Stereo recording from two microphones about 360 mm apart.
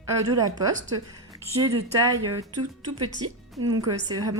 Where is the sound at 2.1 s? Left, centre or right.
Right.